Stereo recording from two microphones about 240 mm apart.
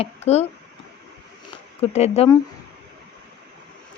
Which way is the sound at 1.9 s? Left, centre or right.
Left.